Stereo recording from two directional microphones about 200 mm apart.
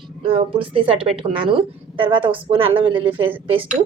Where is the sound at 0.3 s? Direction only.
25° right (ahead or behind).